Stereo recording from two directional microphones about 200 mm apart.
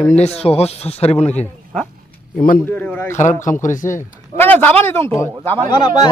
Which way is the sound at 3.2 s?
40° left (ahead or behind).